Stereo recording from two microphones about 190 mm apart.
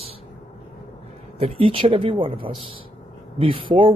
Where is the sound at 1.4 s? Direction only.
30° right (ahead or behind).